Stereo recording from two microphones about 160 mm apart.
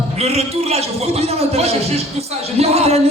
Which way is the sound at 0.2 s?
40° right (ahead or behind).